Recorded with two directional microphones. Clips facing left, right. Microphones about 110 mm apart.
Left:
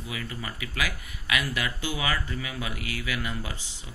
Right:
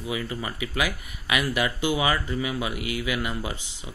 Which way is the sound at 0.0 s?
20° right (ahead or behind).